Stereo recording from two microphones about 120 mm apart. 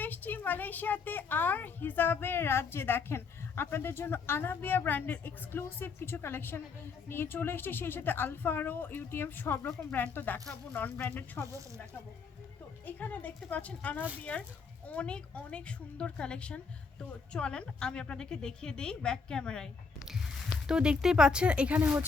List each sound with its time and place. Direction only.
0.0 s a woman's voice: 15° left (ahead or behind)
12.8 s a woman's voice: 15° left (ahead or behind)
20.7 s speech: 5° right (ahead or behind)